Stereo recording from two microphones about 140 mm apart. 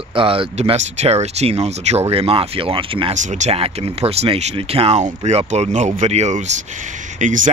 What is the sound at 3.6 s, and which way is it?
Speech, 45° right (ahead or behind).